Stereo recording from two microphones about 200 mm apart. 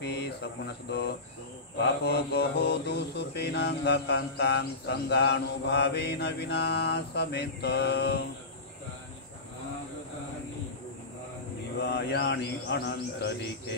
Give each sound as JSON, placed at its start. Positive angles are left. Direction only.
{"t": 0.0, "sound": "mantra", "side_deg": 55}
{"t": 11.8, "sound": "mantra", "side_deg": 55}